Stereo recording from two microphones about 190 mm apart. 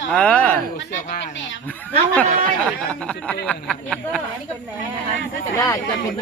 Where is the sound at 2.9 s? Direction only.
5° left (ahead or behind).